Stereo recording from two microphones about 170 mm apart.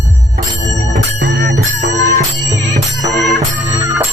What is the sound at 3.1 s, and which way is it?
Music, centre (ahead or behind).